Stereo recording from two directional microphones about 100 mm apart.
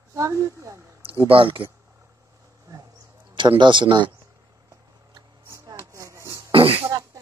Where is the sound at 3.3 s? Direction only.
55° right (ahead or behind).